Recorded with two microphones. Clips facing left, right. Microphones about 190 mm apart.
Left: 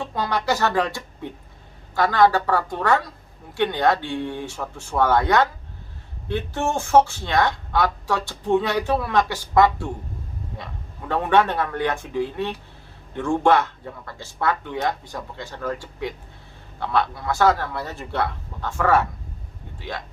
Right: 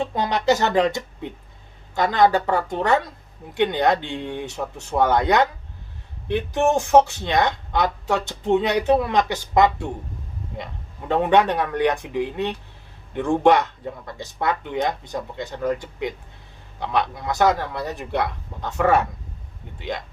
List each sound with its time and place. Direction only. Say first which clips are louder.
0.0 s speech: right 3 dB; 20° right (ahead or behind)
11.1 s speech: right 2 dB; 15° right (ahead or behind)